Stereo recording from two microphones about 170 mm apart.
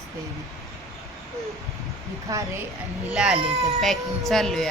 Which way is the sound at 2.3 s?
20° right (ahead or behind).